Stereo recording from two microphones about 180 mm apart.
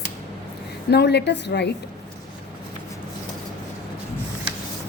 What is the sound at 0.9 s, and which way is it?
Speech, 65° left (ahead or behind).